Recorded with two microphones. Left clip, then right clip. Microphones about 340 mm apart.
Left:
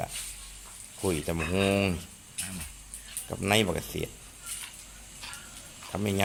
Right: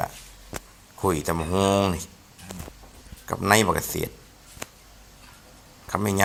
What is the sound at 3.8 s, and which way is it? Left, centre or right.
Speech, centre.